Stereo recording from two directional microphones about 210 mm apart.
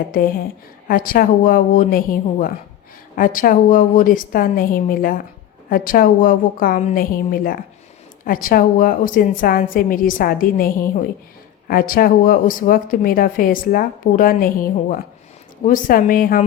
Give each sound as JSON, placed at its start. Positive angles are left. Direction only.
{"t": 0.1, "sound": "a woman's voice", "side_deg": 40}